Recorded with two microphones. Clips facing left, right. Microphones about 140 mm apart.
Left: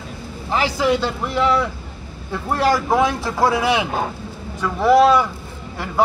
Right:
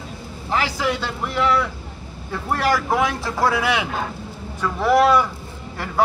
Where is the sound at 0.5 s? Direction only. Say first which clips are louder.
Left 4 dB; 25° left (ahead or behind).